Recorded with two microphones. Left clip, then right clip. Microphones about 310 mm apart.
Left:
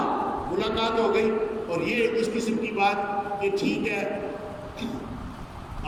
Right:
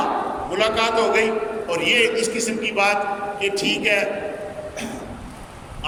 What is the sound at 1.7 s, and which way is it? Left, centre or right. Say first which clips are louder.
A man's voice: right 8 dB; centre.